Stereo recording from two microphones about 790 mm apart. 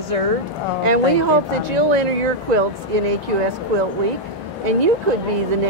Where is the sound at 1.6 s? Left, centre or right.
Right.